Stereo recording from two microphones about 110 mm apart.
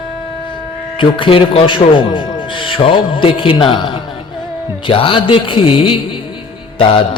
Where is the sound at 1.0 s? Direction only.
50° left (ahead or behind).